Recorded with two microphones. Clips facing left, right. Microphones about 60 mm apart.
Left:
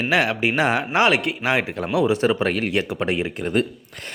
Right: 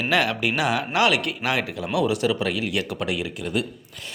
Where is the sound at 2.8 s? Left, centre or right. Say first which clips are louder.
Left 4 dB; left.